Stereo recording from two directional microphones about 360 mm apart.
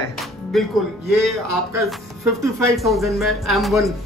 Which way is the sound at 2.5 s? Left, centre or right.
Centre.